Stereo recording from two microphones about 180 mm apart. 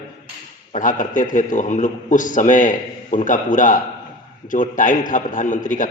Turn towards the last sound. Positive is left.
turn(degrees=45)  # may be behind; listen again after turning